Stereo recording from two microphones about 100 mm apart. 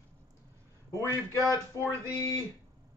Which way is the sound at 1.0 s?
30° right (ahead or behind).